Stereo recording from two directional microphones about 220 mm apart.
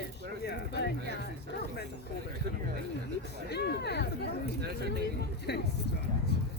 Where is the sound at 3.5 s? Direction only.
50° left (ahead or behind).